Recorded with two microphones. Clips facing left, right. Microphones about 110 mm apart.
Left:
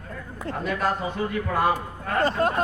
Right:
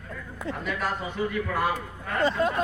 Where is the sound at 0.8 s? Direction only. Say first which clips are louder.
Left 3 dB; 50° left (ahead or behind).